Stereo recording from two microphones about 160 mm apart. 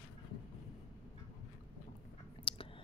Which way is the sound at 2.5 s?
35° left (ahead or behind).